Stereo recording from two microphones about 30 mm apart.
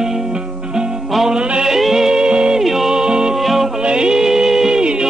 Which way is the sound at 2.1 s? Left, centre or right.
Right.